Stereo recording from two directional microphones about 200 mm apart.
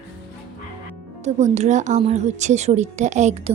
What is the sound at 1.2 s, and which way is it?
A woman's voice, 35° right (ahead or behind).